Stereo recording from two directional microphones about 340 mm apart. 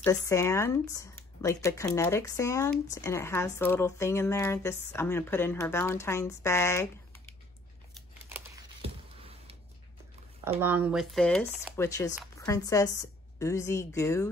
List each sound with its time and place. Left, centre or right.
0.0 s speech: centre
8.8 s a sound: centre
10.4 s speech: centre